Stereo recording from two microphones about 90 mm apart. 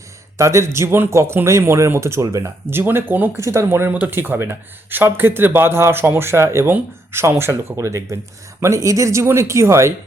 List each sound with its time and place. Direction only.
0.3 s speech: 35° right (ahead or behind)
2.6 s a man's voice: 25° right (ahead or behind)
3.4 s a man's voice: 30° right (ahead or behind)